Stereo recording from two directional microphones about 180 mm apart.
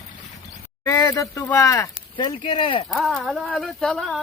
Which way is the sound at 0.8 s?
15° left (ahead or behind).